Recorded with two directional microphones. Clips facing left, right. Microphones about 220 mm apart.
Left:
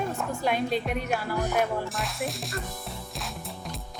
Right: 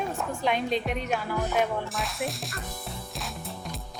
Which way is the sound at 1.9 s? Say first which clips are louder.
Even; centre (ahead or behind).